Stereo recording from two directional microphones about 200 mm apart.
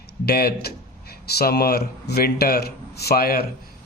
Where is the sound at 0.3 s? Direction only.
50° left (ahead or behind).